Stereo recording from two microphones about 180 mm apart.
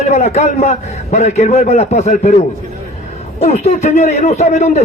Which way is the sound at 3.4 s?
40° left (ahead or behind).